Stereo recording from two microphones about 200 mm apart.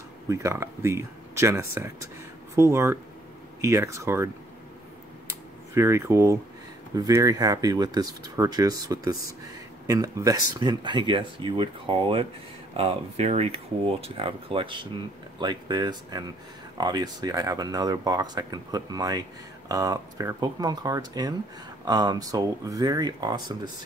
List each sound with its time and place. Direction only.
0.3 s speech: 15° right (ahead or behind)
5.8 s speech: 15° right (ahead or behind)